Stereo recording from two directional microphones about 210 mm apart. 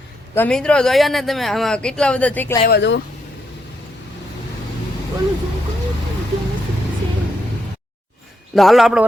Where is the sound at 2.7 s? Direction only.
55° left (ahead or behind).